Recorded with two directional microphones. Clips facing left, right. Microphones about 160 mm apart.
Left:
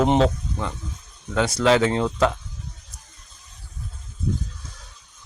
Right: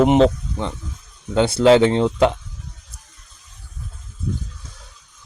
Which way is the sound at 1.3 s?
30° right (ahead or behind).